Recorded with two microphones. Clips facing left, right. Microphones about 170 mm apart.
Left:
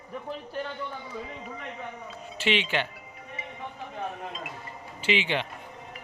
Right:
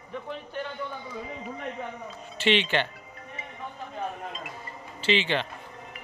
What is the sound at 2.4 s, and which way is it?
Speech, 5° left (ahead or behind).